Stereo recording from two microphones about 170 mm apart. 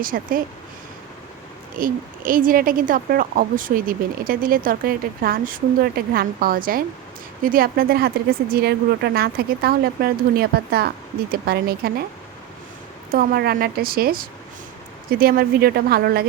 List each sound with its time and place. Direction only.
0.0 s a woman's voice: 55° right (ahead or behind)
1.8 s a woman's voice: 55° right (ahead or behind)
13.1 s a woman's voice: 65° right (ahead or behind)